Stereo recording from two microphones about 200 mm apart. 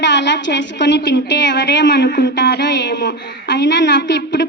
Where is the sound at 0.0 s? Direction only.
60° left (ahead or behind).